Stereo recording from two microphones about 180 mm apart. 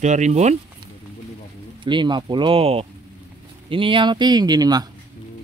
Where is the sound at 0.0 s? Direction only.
40° right (ahead or behind).